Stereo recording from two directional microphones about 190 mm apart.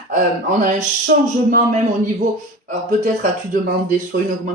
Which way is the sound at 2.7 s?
40° right (ahead or behind).